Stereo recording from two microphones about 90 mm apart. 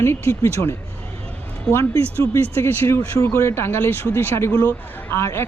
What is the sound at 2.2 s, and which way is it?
Speech, 25° left (ahead or behind).